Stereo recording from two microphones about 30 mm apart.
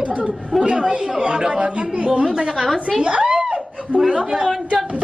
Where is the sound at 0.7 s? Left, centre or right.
Right.